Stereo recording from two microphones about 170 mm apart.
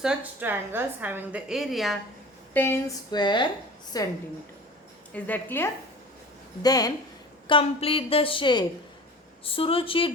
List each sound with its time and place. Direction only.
0.0 s a woman's voice: 5° right (ahead or behind)
2.5 s speech: 15° left (ahead or behind)
3.1 s a woman's voice: 25° left (ahead or behind)
5.1 s a woman's voice: 10° left (ahead or behind)
7.4 s a woman's voice: 30° left (ahead or behind)